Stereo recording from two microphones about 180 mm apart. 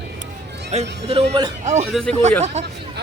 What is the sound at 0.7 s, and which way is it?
Speech, 35° right (ahead or behind).